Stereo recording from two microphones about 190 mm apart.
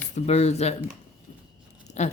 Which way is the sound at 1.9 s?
35° left (ahead or behind).